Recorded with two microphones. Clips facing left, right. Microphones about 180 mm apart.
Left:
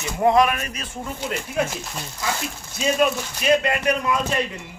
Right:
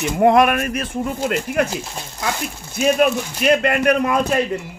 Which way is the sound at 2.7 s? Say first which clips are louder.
Right 4 dB; 60° right (ahead or behind).